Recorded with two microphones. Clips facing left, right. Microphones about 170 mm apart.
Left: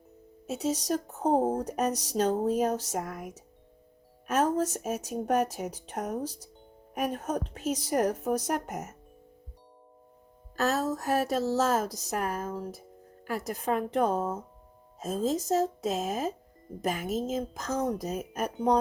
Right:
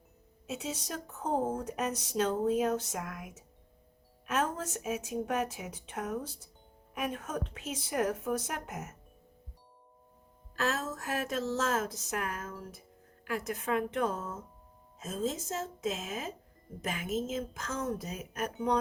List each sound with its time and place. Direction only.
0.4 s speech: 40° left (ahead or behind)
10.5 s speech: 40° left (ahead or behind)